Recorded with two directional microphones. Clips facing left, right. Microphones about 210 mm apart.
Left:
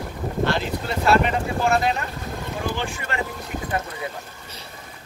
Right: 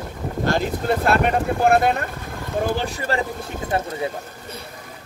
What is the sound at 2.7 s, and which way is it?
Speech, 40° right (ahead or behind).